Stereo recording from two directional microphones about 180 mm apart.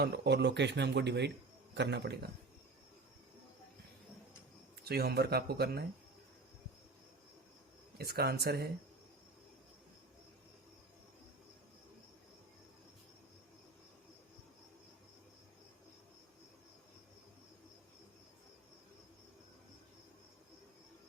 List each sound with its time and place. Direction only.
0.0 s speech: 70° right (ahead or behind)
4.9 s speech: 60° right (ahead or behind)
7.9 s speech: 60° right (ahead or behind)